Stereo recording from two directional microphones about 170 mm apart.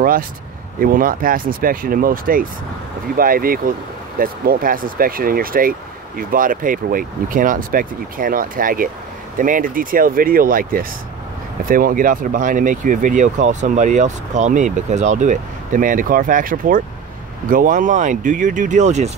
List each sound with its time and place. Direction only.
0.7 s speech: 55° right (ahead or behind)